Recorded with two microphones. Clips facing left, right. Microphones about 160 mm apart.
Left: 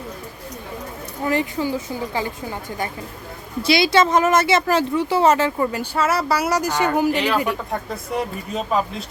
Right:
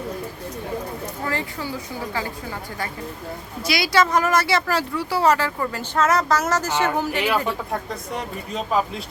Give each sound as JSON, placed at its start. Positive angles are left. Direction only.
{"t": 1.2, "sound": "speech", "side_deg": 15}
{"t": 7.7, "sound": "speech", "side_deg": 0}